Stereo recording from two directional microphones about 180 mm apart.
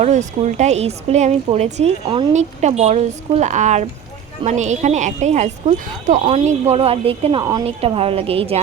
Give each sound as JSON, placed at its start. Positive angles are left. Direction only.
{"t": 0.0, "sound": "a woman's voice", "side_deg": -40}